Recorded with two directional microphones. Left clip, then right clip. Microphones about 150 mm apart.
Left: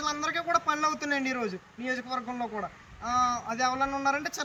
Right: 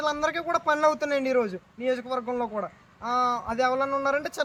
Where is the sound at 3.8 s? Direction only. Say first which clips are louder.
Right 3 dB; 35° right (ahead or behind).